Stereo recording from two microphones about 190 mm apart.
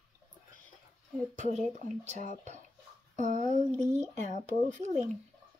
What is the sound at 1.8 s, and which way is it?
Speech, 40° right (ahead or behind).